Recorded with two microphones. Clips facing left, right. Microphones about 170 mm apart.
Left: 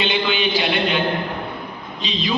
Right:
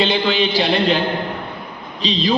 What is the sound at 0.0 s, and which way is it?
Speech, 35° right (ahead or behind).